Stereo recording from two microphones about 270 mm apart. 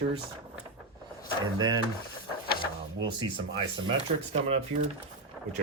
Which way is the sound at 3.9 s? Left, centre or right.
Right.